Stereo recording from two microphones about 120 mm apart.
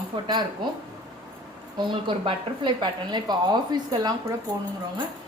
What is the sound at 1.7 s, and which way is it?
A woman's voice, 40° right (ahead or behind).